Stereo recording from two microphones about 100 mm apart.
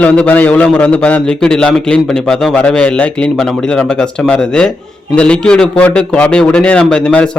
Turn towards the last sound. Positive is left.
turn(degrees=10)  # may be behind; listen again after turning